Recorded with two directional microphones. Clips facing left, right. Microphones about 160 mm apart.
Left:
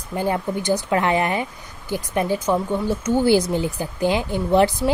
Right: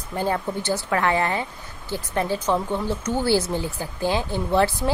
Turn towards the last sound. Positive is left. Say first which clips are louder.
# left 3 dB
turn(degrees=15)  # may be behind; listen again after turning